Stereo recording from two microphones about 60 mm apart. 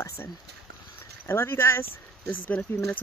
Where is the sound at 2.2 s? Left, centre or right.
Left.